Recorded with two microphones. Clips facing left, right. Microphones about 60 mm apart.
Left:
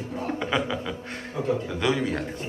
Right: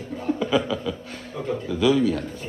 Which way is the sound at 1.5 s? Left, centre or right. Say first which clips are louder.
Right 4 dB; left.